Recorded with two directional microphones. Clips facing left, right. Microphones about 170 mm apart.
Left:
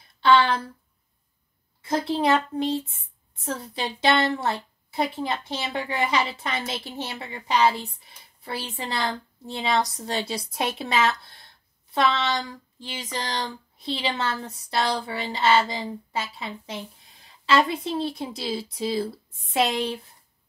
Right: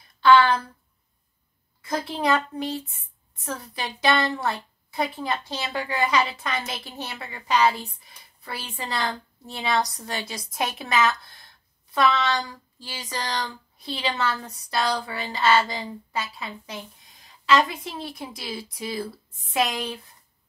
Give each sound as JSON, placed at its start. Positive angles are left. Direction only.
{"t": 0.2, "sound": "a woman's voice", "side_deg": 25}
{"t": 1.9, "sound": "a woman's voice", "side_deg": 25}